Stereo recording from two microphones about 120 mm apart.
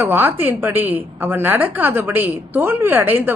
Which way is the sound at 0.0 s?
20° right (ahead or behind).